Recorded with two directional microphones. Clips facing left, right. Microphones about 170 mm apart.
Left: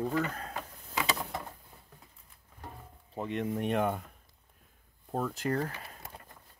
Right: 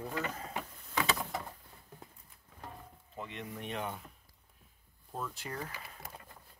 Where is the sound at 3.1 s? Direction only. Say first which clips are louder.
Left 10 dB; 50° left (ahead or behind).